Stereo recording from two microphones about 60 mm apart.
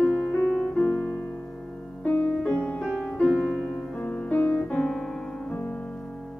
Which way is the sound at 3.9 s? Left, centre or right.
Centre.